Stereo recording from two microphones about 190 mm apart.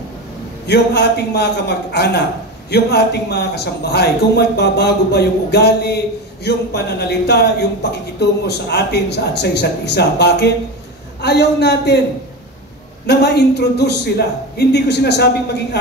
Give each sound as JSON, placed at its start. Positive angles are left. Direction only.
{"t": 0.7, "sound": "a man's voice", "side_deg": 60}
{"t": 13.0, "sound": "a man's voice", "side_deg": 60}